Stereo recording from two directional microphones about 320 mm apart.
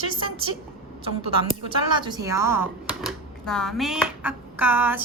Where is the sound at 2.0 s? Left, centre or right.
Centre.